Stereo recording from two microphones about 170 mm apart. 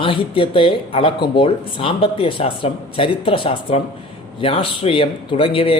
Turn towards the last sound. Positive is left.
turn(degrees=35)  # may be behind; listen again after turning